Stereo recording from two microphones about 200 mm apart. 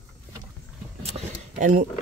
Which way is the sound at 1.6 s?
40° right (ahead or behind).